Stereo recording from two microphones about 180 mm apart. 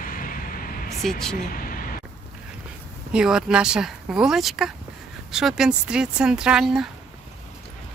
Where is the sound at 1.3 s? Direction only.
50° left (ahead or behind).